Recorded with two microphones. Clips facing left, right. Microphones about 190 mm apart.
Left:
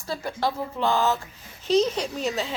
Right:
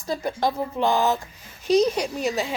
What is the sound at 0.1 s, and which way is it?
A woman's voice, 15° right (ahead or behind).